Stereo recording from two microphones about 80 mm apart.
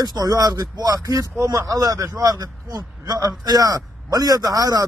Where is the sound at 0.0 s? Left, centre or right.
Right.